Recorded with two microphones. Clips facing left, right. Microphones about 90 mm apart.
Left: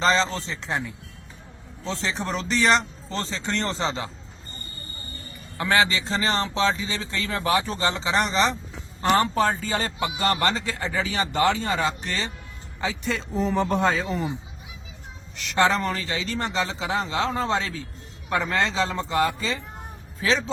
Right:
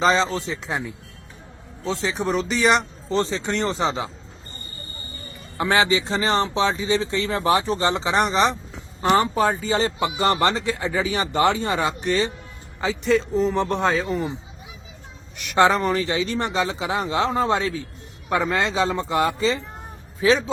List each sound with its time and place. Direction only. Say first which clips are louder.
0.0 s a man's voice: right 2 dB; 10° right (ahead or behind)
5.5 s speech: right 2 dB; 20° right (ahead or behind)
9.0 s a man's voice: right 2 dB; 5° right (ahead or behind)
9.6 s speech: right 5 dB; 20° right (ahead or behind)
12.8 s a man's voice: right 7 dB; centre (ahead or behind)
15.4 s a man's voice: right 4 dB; 15° right (ahead or behind)